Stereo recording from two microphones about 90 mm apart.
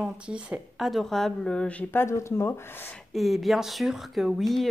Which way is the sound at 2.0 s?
30° left (ahead or behind).